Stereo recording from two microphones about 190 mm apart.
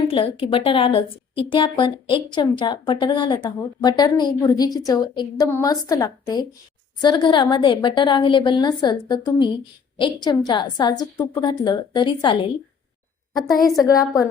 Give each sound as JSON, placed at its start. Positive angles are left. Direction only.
{"t": 0.1, "sound": "a woman's voice", "side_deg": 30}
{"t": 14.0, "sound": "a woman's voice", "side_deg": 15}